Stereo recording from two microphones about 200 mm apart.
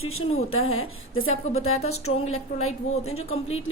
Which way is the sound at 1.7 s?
30° left (ahead or behind).